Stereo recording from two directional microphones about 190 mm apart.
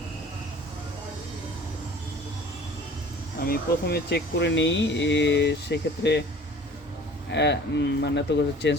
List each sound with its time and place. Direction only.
3.4 s speech: 55° left (ahead or behind)
7.3 s speech: 65° left (ahead or behind)